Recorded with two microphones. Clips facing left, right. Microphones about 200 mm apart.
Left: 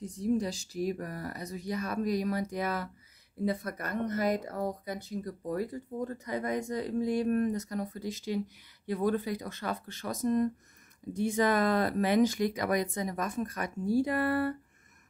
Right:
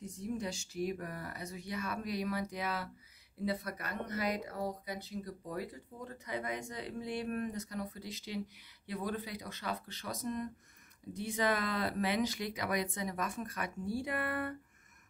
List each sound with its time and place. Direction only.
0.0 s speech: 35° left (ahead or behind)